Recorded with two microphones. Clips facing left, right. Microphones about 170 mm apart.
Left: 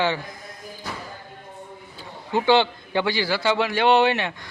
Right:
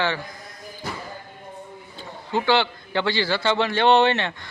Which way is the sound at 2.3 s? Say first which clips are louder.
Left 2 dB; 20° left (ahead or behind).